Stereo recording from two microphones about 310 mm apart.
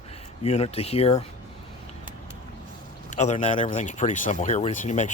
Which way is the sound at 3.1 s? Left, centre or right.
Left.